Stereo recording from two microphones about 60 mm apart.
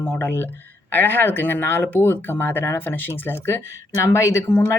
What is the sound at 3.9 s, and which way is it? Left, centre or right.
Speech, left.